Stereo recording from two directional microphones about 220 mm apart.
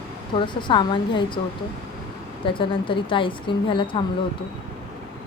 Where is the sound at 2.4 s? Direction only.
20° left (ahead or behind).